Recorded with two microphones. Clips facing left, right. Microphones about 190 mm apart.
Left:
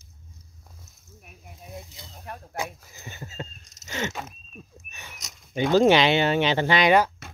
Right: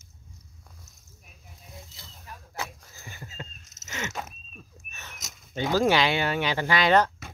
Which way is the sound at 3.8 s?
35° left (ahead or behind).